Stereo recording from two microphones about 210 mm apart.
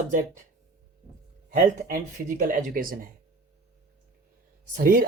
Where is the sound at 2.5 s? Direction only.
40° right (ahead or behind).